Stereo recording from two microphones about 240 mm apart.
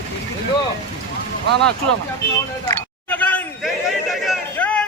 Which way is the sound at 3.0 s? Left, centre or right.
Centre.